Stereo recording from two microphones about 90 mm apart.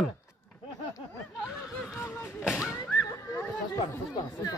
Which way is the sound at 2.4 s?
5° right (ahead or behind).